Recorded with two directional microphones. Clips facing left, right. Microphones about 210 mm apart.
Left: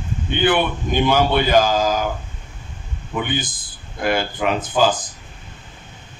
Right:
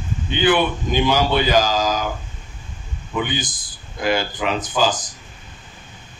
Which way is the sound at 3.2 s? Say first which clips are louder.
Left 3 dB; 55° left (ahead or behind).